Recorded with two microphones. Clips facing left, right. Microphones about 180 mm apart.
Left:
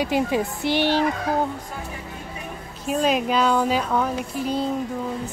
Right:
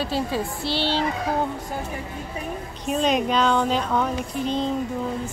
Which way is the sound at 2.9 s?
5° left (ahead or behind).